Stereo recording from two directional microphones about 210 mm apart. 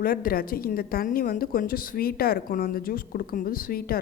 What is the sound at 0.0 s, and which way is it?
A woman's voice, 45° left (ahead or behind).